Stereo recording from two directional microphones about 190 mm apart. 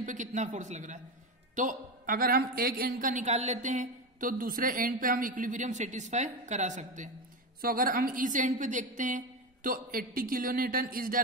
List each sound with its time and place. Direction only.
0.0 s a man's voice: 40° right (ahead or behind)